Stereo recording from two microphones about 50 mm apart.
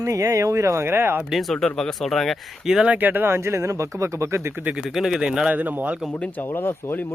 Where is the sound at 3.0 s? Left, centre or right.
Right.